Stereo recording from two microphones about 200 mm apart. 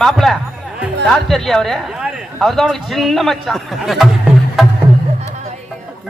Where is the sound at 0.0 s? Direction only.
Centre (ahead or behind).